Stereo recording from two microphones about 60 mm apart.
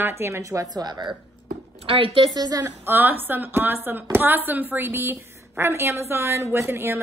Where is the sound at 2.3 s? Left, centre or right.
Right.